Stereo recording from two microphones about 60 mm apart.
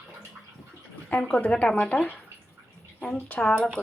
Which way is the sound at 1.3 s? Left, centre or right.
Left.